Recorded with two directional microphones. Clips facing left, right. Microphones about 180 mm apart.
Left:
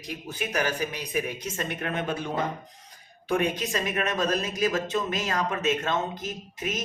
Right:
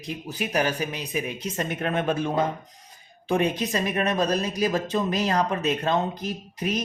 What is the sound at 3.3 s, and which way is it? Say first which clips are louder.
Speech: right 2 dB; 30° right (ahead or behind).